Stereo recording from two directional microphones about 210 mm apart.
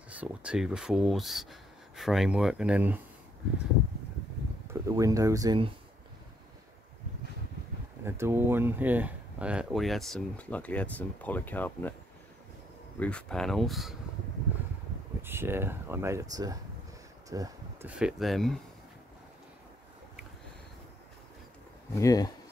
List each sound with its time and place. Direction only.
0.1 s speech: 5° right (ahead or behind)
4.6 s speech: 15° right (ahead or behind)
8.0 s speech: 10° right (ahead or behind); by 11.9 s 10° left (ahead or behind)
13.0 s speech: 5° left (ahead or behind)
15.2 s speech: 10° right (ahead or behind)
17.3 s a sound: 15° right (ahead or behind)
17.9 s speech: centre (ahead or behind)
21.9 s speech: 15° left (ahead or behind)